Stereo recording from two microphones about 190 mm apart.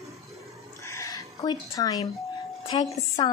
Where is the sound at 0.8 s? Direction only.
15° left (ahead or behind).